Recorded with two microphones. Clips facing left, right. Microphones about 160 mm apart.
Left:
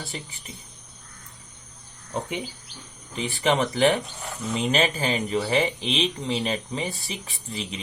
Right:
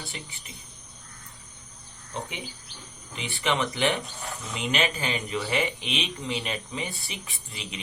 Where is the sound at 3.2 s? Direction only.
40° left (ahead or behind).